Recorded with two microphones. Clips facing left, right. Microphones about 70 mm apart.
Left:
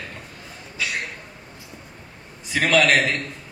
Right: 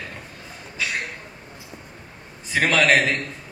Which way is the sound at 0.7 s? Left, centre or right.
Right.